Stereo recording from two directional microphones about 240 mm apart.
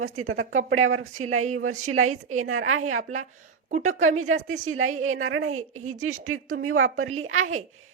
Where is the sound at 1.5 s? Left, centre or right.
Right.